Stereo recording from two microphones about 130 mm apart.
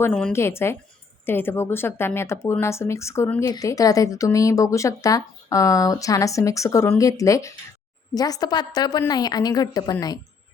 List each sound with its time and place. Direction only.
0.1 s speech: 5° left (ahead or behind)
0.3 s speech: 20° left (ahead or behind)